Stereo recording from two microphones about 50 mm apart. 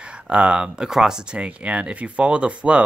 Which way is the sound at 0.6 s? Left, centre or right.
Centre.